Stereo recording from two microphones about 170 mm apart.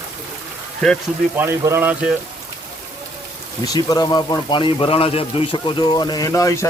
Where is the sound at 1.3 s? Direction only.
15° right (ahead or behind).